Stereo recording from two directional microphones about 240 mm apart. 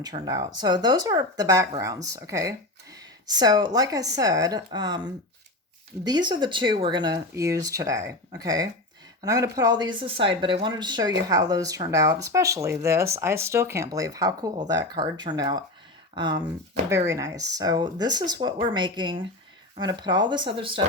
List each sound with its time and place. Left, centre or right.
0.0 s speech: centre